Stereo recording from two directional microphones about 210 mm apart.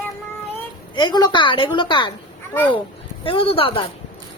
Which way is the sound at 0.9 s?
20° left (ahead or behind).